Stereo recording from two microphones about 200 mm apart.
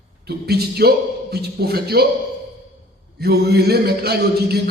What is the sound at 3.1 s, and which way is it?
A man's voice, 55° right (ahead or behind).